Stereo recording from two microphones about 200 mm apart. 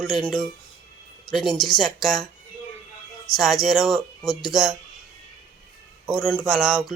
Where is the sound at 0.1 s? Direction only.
20° left (ahead or behind).